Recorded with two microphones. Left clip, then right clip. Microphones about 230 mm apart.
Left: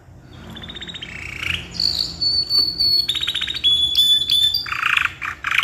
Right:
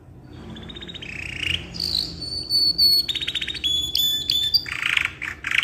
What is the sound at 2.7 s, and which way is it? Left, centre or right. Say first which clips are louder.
Alarm: left 1 dB; centre.